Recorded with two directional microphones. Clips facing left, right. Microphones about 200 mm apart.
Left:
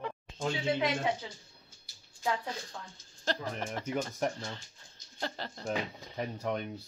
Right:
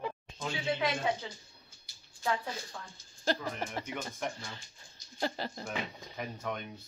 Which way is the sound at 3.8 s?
40° left (ahead or behind).